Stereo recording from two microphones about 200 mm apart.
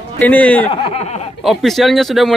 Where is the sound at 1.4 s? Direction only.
Centre (ahead or behind).